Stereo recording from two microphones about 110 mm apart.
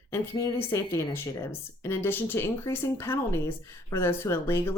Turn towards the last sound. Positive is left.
turn(degrees=25)  # may be behind; listen again after turning